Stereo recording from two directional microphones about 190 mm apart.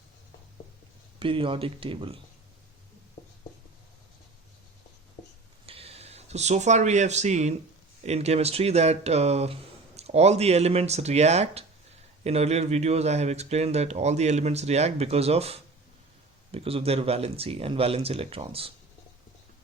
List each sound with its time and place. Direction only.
1.2 s speech: 25° right (ahead or behind)
5.6 s speech: 30° right (ahead or behind)